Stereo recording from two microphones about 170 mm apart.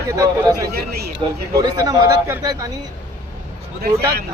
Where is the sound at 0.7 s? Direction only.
65° right (ahead or behind).